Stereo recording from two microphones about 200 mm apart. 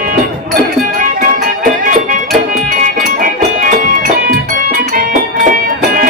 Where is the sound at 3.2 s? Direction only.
40° right (ahead or behind).